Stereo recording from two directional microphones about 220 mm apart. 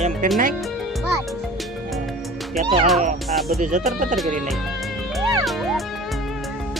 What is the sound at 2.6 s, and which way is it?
Speech, 25° right (ahead or behind).